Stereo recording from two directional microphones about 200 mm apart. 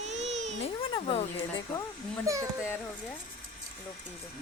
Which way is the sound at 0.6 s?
25° left (ahead or behind).